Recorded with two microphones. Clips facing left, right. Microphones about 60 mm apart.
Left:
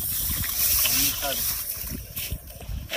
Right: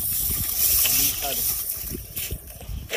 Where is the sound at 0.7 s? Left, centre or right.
Left.